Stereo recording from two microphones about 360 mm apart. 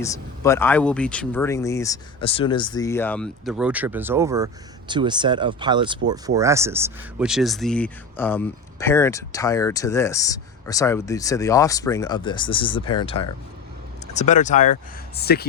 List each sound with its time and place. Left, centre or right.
0.0 s speech: centre; by 15.4 s left